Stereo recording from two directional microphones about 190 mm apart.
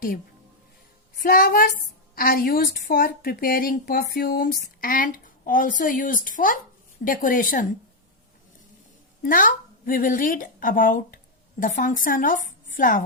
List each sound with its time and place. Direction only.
1.2 s a woman's voice: 50° left (ahead or behind)
9.2 s a woman's voice: 45° left (ahead or behind)